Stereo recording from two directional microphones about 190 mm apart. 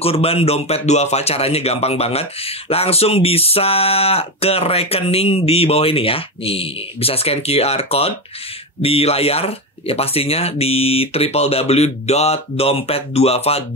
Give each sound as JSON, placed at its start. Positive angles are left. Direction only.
{"t": 0.0, "sound": "speech", "side_deg": 30}